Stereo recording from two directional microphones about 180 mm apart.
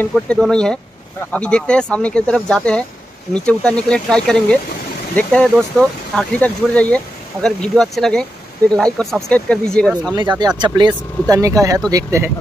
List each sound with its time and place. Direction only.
0.0 s speech: 5° left (ahead or behind)
10.6 s speech: 25° right (ahead or behind)